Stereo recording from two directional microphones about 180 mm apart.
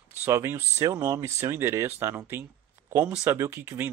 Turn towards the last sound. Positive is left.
turn(degrees=-10)  # may be behind; listen again after turning